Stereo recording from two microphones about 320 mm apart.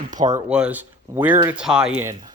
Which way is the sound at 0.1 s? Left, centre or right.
Right.